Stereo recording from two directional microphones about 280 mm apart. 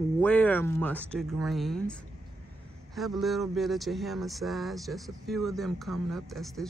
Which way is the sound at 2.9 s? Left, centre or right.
Centre.